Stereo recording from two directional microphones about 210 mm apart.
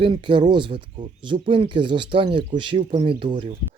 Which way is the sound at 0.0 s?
20° right (ahead or behind).